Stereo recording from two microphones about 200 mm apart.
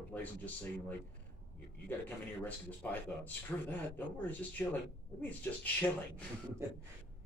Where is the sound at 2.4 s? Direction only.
10° left (ahead or behind).